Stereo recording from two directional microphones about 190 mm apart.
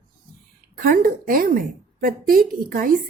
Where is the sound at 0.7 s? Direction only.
50° right (ahead or behind).